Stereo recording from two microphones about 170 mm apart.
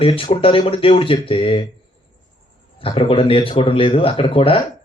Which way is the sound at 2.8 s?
30° left (ahead or behind).